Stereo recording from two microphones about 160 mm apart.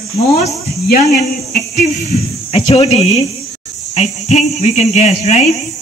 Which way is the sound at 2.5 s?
35° left (ahead or behind).